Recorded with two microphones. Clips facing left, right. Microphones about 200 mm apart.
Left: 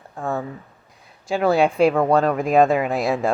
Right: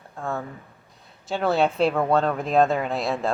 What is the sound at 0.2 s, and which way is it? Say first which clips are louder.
Speech: left 4 dB; 15° left (ahead or behind).